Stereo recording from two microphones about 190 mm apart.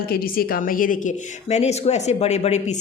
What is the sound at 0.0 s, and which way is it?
A woman's voice, 50° left (ahead or behind).